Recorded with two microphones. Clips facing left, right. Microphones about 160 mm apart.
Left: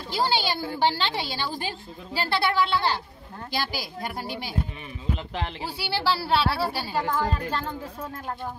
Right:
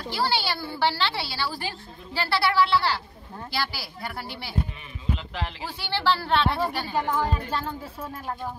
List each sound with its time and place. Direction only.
0.1 s a woman's voice: 15° left (ahead or behind)
7.1 s speech: 10° right (ahead or behind)